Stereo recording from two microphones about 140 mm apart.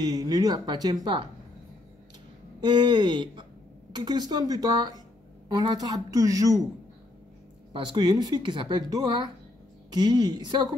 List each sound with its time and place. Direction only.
0.0 s speech: 25° right (ahead or behind)
2.6 s speech: 35° right (ahead or behind)
7.7 s speech: 35° right (ahead or behind)